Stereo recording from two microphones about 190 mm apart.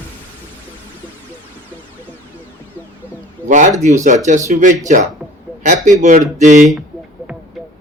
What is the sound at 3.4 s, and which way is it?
Speech, 40° right (ahead or behind).